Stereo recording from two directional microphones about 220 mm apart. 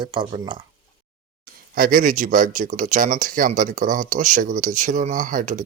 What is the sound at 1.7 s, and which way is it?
Speech, 40° right (ahead or behind).